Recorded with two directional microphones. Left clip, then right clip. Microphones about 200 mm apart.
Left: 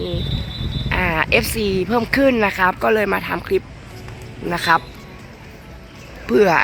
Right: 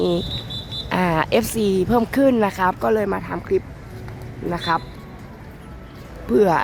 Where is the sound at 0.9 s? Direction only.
15° right (ahead or behind); by 4.8 s 5° left (ahead or behind).